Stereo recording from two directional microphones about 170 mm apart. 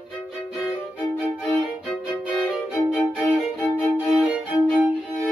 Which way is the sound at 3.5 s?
15° left (ahead or behind).